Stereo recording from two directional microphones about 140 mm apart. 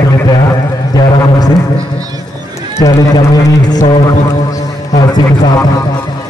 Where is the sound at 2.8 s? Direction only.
25° left (ahead or behind).